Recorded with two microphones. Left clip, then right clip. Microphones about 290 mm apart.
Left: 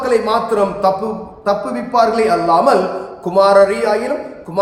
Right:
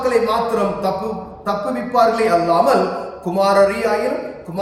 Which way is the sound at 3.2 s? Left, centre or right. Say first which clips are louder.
Left 5 dB; centre.